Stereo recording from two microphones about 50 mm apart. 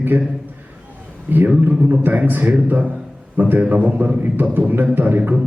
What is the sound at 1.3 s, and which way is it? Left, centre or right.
A man's voice, right.